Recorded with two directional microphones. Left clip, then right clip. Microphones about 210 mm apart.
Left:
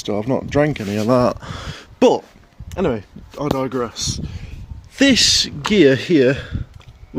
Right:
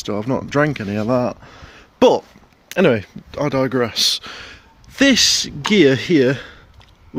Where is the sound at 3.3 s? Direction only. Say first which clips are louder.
Right 2 dB; 30° right (ahead or behind).